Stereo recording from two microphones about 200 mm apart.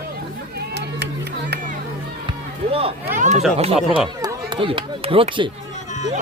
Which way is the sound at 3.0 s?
40° right (ahead or behind).